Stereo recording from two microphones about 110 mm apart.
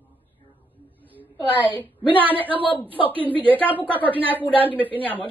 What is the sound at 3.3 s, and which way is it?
A woman's voice, 15° left (ahead or behind).